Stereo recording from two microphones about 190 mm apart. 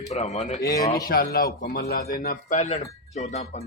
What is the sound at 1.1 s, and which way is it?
A man's voice, 50° left (ahead or behind).